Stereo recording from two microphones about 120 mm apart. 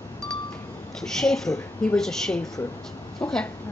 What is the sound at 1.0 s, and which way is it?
A woman's voice, 5° left (ahead or behind).